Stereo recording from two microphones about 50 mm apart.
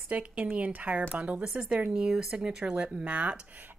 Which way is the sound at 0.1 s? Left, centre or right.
Right.